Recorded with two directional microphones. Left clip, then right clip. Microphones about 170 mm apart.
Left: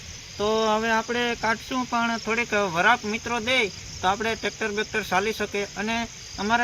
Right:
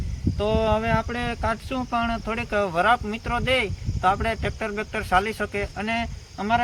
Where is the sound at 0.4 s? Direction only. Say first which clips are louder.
Even; 25° right (ahead or behind).